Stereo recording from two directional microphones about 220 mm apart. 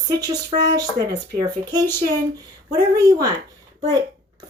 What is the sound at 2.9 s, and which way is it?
Speech, 15° right (ahead or behind).